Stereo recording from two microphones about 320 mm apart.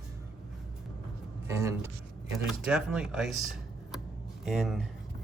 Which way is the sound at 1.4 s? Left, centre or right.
Centre.